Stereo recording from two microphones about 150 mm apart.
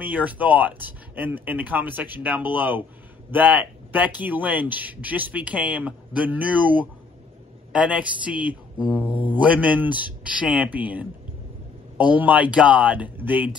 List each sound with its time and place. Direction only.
0.0 s speech: 10° right (ahead or behind)